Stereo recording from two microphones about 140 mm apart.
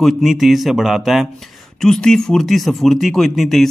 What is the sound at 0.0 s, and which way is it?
A man's voice, centre (ahead or behind).